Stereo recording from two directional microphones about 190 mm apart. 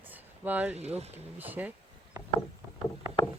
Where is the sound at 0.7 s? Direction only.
35° right (ahead or behind).